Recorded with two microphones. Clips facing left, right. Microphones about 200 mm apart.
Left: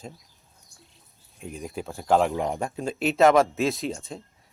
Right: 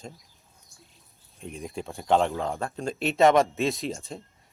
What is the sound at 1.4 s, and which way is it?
Speech, centre (ahead or behind).